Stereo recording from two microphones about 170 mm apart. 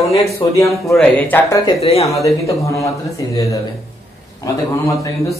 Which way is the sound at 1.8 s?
35° left (ahead or behind).